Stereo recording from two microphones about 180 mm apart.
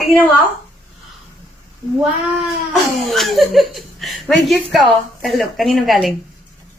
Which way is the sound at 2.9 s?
Centre (ahead or behind).